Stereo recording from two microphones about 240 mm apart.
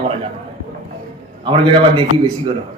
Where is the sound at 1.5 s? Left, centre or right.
Right.